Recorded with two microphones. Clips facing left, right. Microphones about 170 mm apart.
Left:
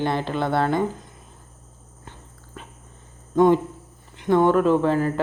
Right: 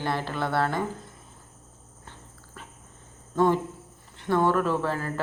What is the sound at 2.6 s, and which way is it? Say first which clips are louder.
Dog: left 4 dB; 20° left (ahead or behind).